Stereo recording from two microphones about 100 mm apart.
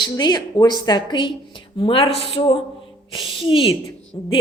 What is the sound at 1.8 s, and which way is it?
Speech, 65° left (ahead or behind).